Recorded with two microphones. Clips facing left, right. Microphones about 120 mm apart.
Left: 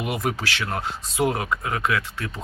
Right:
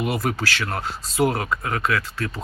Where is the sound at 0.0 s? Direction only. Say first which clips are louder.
Right 2 dB; 20° left (ahead or behind).